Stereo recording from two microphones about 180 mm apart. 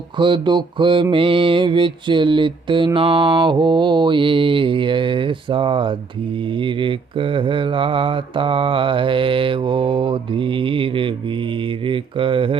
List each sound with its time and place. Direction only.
0.2 s mantra: 25° right (ahead or behind)